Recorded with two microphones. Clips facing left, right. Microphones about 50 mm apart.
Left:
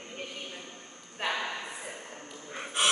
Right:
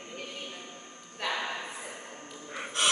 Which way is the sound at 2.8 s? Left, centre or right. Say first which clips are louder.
Left 1 dB; centre.